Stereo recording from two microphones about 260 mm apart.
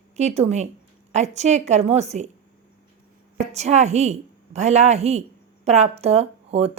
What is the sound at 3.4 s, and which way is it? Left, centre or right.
A woman's voice, right.